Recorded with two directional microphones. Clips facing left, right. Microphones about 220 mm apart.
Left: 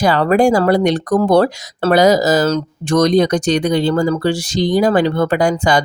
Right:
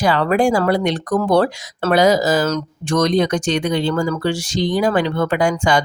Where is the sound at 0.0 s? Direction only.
40° left (ahead or behind).